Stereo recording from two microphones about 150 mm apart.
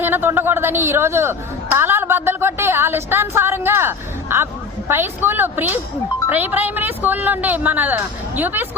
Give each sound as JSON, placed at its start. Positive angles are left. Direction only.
{"t": 0.0, "sound": "a woman's voice", "side_deg": -15}